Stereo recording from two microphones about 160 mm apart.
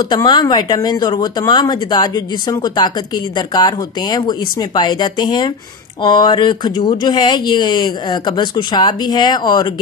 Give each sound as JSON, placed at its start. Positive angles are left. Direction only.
{"t": 0.1, "sound": "speech", "side_deg": 25}